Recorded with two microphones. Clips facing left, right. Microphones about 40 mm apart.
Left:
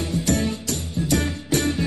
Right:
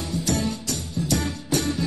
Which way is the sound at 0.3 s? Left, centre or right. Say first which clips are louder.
Left 2 dB; left.